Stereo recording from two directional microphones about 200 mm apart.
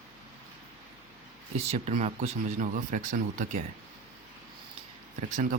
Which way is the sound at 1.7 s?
35° right (ahead or behind).